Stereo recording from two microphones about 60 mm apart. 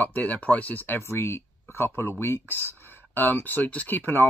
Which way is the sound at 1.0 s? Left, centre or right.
Left.